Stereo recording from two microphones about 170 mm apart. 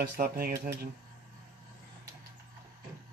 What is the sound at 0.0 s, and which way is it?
Speech, 70° right (ahead or behind).